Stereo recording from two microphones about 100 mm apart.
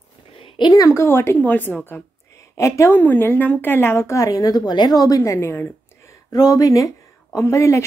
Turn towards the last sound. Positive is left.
turn(degrees=30)  # may be behind; listen again after turning